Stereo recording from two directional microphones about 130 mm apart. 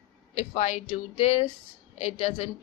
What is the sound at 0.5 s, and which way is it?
Speech, 60° left (ahead or behind).